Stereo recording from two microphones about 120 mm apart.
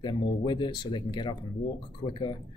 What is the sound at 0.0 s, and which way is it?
Speech, 40° left (ahead or behind).